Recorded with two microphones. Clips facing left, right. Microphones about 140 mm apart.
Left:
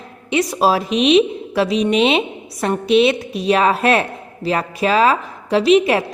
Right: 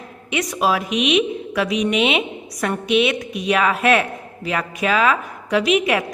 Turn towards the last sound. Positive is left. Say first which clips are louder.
# left 4 dB
turn(degrees=30)  # may be behind; listen again after turning